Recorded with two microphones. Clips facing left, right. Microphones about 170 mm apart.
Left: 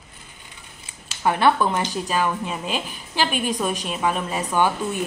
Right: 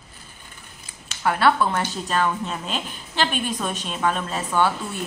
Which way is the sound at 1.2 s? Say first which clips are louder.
Left 1 dB; 20° left (ahead or behind).